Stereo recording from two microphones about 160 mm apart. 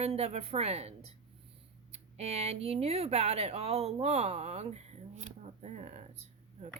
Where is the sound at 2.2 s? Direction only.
40° right (ahead or behind).